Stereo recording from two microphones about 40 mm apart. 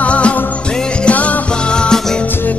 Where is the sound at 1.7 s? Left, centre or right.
Left.